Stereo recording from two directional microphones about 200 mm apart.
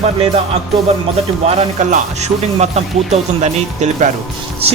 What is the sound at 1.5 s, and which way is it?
Speech, 35° right (ahead or behind).